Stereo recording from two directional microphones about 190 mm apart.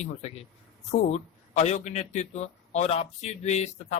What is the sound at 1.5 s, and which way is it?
A man's voice, 35° left (ahead or behind).